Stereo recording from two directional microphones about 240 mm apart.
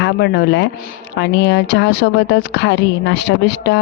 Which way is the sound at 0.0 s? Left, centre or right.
Left.